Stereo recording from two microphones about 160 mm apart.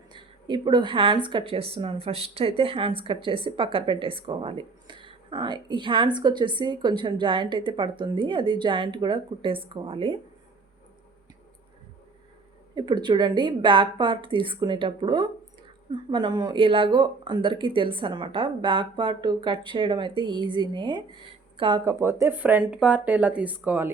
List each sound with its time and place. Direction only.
0.1 s speech: 30° right (ahead or behind)
12.7 s a woman's voice: 30° right (ahead or behind)
21.5 s a sound: 30° right (ahead or behind)
21.8 s speech: 15° right (ahead or behind)